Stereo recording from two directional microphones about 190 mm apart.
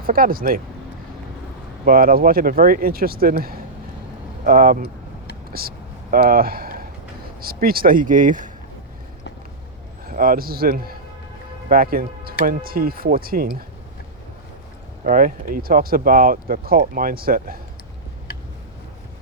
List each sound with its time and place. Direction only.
0.0 s speech: 50° right (ahead or behind)
1.8 s speech: 50° right (ahead or behind)
5.5 s a sound: 55° right (ahead or behind)
7.4 s speech: 50° right (ahead or behind)
10.1 s speech: 50° right (ahead or behind)
15.0 s speech: 45° right (ahead or behind)